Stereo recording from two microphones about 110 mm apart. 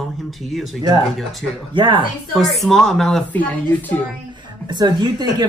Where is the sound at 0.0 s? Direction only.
Centre (ahead or behind).